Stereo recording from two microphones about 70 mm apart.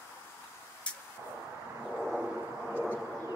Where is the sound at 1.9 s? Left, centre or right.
Centre.